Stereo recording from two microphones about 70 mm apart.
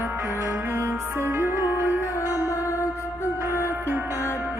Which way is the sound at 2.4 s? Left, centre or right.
Left.